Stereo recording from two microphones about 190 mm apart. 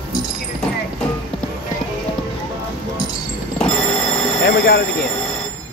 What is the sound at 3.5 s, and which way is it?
Music, 5° left (ahead or behind).